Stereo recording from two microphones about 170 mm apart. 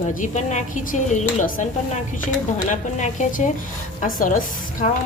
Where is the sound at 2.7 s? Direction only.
45° left (ahead or behind).